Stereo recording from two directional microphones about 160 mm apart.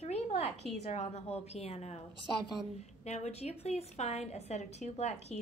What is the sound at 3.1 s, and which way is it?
A woman's voice, 40° left (ahead or behind).